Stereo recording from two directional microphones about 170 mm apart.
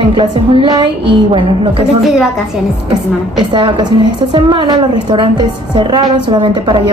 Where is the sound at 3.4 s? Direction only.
30° right (ahead or behind).